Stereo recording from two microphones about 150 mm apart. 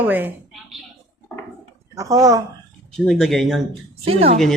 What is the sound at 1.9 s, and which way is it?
Speech, 20° right (ahead or behind).